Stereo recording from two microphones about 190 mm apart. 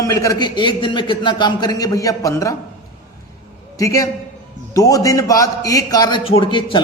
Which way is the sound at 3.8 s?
15° left (ahead or behind).